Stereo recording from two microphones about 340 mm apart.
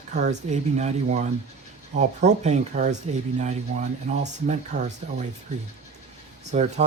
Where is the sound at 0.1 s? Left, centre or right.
Right.